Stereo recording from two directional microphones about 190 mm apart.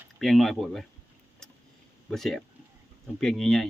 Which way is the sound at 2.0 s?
Centre (ahead or behind).